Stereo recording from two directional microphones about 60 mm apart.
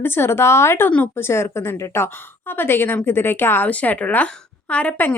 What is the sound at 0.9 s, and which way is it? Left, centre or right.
Speech, left.